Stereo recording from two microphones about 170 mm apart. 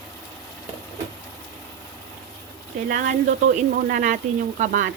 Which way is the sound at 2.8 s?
50° right (ahead or behind).